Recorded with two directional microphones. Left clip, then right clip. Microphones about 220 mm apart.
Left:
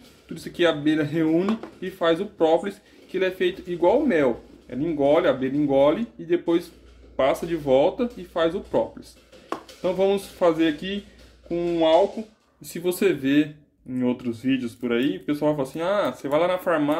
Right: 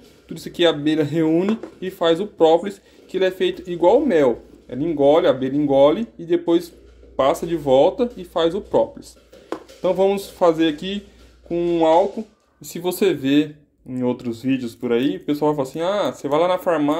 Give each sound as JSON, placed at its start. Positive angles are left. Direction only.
{"t": 0.3, "sound": "speech", "side_deg": -15}